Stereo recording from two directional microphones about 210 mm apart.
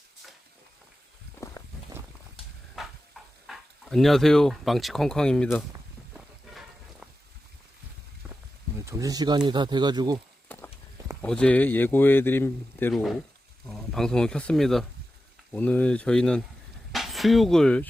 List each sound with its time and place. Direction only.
2.8 s a sound: centre (ahead or behind)
3.4 s speech: centre (ahead or behind)
6.1 s music: centre (ahead or behind)
8.8 s speech: 15° right (ahead or behind)
10.5 s clip-clop: 5° left (ahead or behind)
11.2 s speech: 5° left (ahead or behind)